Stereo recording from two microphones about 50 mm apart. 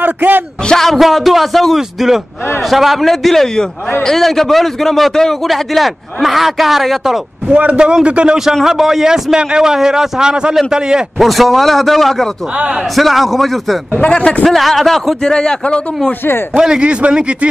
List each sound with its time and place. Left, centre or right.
0.0 s a man's voice: right
0.7 s a man's voice: centre
7.5 s a man's voice: right
7.8 s a man's voice: centre
8.6 s a man's voice: centre
11.1 s a man's voice: centre
13.9 s speech: left
14.4 s a man's voice: centre
15.2 s a man's voice: centre
16.5 s a man's voice: centre